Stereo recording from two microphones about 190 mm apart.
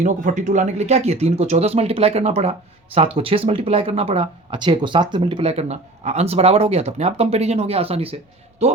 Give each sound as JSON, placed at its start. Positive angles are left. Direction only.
{"t": 0.0, "sound": "speech", "side_deg": -40}